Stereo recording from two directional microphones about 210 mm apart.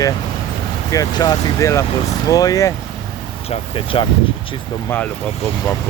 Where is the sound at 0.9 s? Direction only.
15° left (ahead or behind).